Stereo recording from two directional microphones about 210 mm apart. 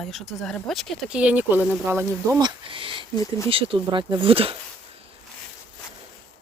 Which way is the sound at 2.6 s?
25° right (ahead or behind).